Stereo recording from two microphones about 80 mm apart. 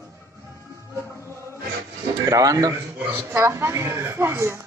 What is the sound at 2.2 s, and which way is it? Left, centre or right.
Speech, right.